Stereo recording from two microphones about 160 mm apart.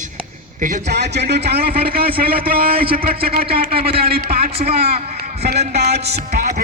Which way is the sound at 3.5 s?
35° right (ahead or behind).